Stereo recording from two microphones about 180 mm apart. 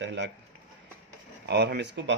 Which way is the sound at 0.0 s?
80° right.